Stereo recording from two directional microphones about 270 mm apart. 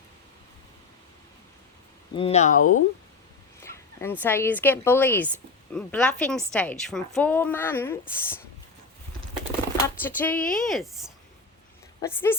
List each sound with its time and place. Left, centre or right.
2.1 s speech: left
3.6 s speech: centre
9.8 s a sound: centre
10.4 s speech: centre